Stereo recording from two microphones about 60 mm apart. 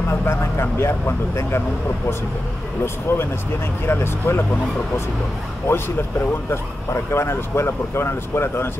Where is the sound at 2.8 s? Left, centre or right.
Left.